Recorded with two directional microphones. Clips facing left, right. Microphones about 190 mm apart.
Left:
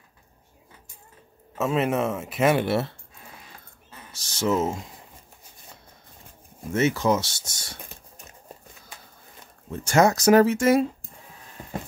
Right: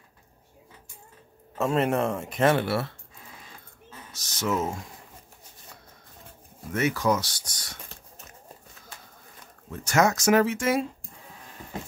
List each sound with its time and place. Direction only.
1.6 s speech: centre (ahead or behind); by 2.9 s 20° left (ahead or behind)
4.1 s speech: 30° left (ahead or behind)
6.7 s speech: 25° left (ahead or behind)
9.7 s speech: 30° left (ahead or behind)